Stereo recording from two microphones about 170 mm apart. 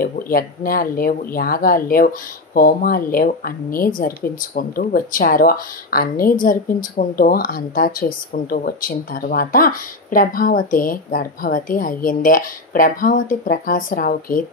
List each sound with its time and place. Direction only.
0.0 s speech: 60° left (ahead or behind)